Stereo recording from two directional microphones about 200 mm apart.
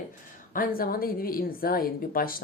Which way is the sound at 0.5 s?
45° left (ahead or behind).